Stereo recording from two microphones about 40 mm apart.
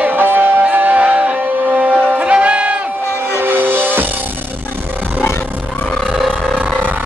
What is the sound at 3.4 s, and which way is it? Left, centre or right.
Music, right.